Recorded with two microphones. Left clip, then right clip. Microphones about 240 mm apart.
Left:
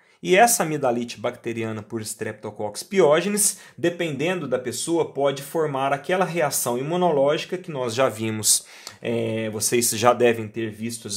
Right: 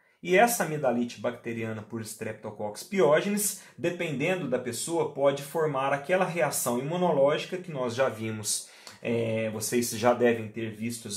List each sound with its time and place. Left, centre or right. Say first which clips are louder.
0.2 s speech: left 6 dB; left